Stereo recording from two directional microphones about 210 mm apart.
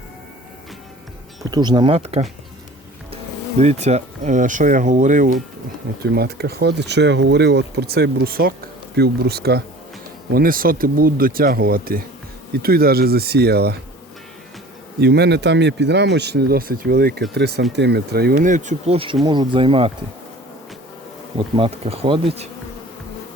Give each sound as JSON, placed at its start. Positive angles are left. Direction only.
{"t": 1.5, "sound": "bee", "side_deg": -20}
{"t": 3.6, "sound": "speech", "side_deg": -30}
{"t": 6.0, "sound": "speech", "side_deg": -50}
{"t": 15.0, "sound": "speech", "side_deg": -50}
{"t": 19.2, "sound": "bee", "side_deg": -20}
{"t": 21.3, "sound": "bee", "side_deg": -25}